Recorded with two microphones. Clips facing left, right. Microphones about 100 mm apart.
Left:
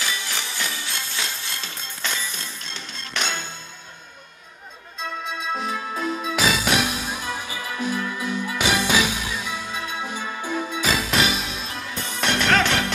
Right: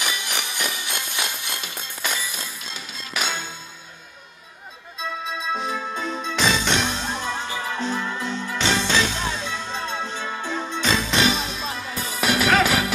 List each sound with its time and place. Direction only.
0.0 s music: 15° right (ahead or behind)
5.5 s music: centre (ahead or behind)